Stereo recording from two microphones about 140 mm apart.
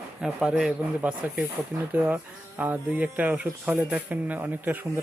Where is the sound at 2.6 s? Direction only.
10° right (ahead or behind).